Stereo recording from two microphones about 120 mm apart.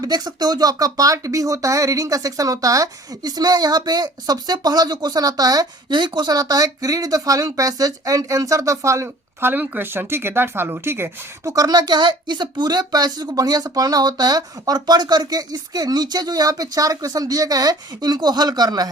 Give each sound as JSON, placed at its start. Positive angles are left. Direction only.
{"t": 0.0, "sound": "speech", "side_deg": -35}